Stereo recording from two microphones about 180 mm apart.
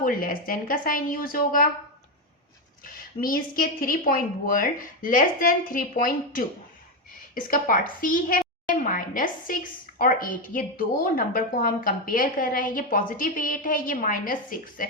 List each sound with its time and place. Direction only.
0.0 s speech: 50° left (ahead or behind)
2.8 s a woman's voice: 50° left (ahead or behind)